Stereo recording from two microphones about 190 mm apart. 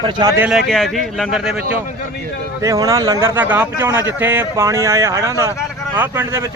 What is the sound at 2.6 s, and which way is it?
A man's voice, 15° right (ahead or behind).